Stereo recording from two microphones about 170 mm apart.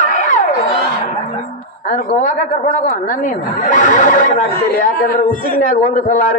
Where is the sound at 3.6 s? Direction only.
50° left (ahead or behind).